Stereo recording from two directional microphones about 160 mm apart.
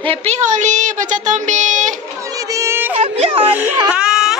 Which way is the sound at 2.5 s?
15° right (ahead or behind).